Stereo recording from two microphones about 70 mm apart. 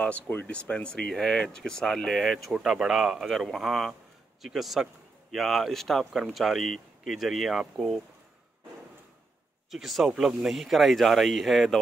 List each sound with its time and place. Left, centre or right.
0.0 s speech: left; by 8.0 s centre
9.7 s speech: centre